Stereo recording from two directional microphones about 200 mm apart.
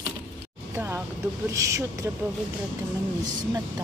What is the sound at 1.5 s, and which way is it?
Speech, 15° right (ahead or behind).